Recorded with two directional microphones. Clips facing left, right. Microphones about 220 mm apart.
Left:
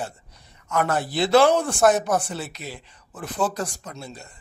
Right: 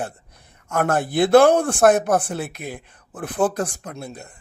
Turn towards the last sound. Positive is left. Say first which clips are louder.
# right 4 dB
turn(degrees=-55)  # may be behind; listen again after turning